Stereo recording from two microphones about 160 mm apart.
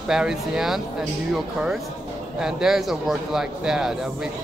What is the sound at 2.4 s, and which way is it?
Speech, 5° right (ahead or behind).